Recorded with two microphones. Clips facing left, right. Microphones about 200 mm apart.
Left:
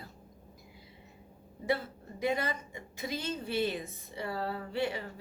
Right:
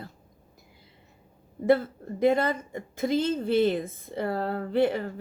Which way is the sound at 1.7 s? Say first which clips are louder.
Right 10 dB; 55° right (ahead or behind).